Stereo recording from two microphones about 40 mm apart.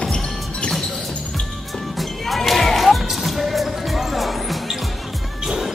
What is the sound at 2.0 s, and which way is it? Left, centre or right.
Basketball bounce, centre.